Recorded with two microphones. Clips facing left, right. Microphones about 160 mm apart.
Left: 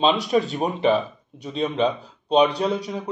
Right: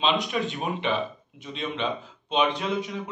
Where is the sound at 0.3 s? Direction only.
40° left (ahead or behind).